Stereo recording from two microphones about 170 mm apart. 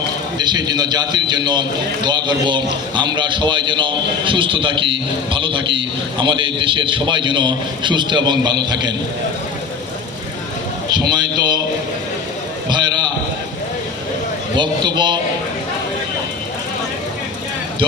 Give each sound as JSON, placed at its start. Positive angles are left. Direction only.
{"t": 0.3, "sound": "a man's voice", "side_deg": -25}
{"t": 11.1, "sound": "a man's voice", "side_deg": -25}
{"t": 14.5, "sound": "a man's voice", "side_deg": -25}